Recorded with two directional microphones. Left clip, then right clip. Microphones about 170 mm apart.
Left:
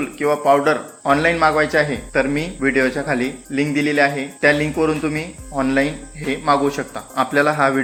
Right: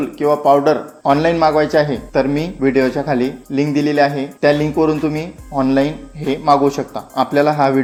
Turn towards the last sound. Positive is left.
turn(degrees=-35)  # may be behind; listen again after turning